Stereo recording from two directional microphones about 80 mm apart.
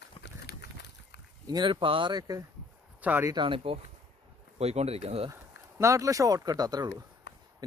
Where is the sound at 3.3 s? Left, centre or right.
Right.